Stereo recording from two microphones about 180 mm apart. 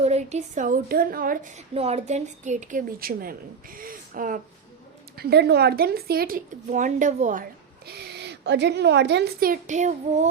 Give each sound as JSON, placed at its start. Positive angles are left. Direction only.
{"t": 0.0, "sound": "a woman's voice", "side_deg": -40}
{"t": 1.7, "sound": "a woman's voice", "side_deg": -35}
{"t": 5.1, "sound": "speech", "side_deg": -60}
{"t": 7.9, "sound": "a woman's voice", "side_deg": -65}